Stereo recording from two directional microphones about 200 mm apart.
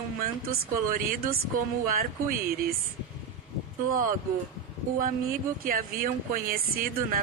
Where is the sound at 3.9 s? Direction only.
45° right (ahead or behind).